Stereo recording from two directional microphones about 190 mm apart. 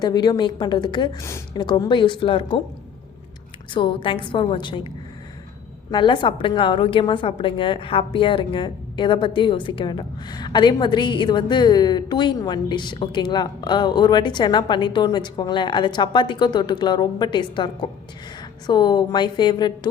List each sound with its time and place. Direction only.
0.0 s a woman's voice: 20° left (ahead or behind)
3.8 s a woman's voice: 25° left (ahead or behind)
5.9 s a woman's voice: 25° left (ahead or behind)